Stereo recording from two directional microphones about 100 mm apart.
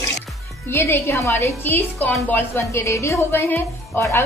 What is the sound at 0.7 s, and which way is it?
Speech, 25° left (ahead or behind).